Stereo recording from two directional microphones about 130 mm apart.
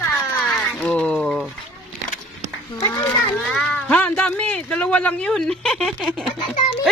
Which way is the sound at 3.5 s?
5° left (ahead or behind).